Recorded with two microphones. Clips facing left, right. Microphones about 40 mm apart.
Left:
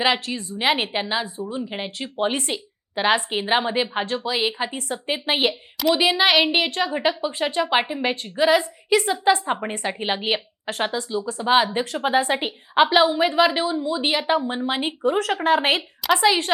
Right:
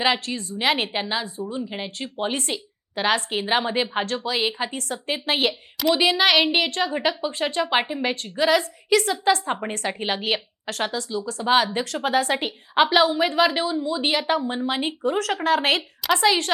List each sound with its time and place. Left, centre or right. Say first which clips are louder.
0.0 s a woman's voice: left 1 dB; centre
15.0 s speech: left 3 dB; left
16.1 s a woman's voice: left 1 dB; centre